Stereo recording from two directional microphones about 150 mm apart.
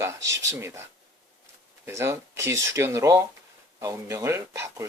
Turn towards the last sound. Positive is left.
turn(degrees=-20)  # may be behind; listen again after turning